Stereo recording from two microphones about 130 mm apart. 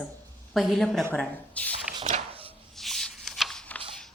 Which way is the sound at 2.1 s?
50° right (ahead or behind).